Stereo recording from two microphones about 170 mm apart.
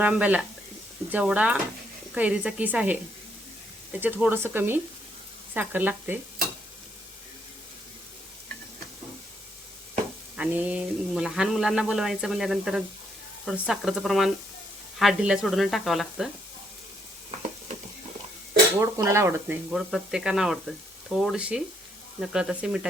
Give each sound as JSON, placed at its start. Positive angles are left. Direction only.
{"t": 0.0, "sound": "speech", "side_deg": -10}
{"t": 4.0, "sound": "speech", "side_deg": -10}
{"t": 10.3, "sound": "speech", "side_deg": -10}
{"t": 18.8, "sound": "speech", "side_deg": -15}
{"t": 19.7, "sound": "speech", "side_deg": -5}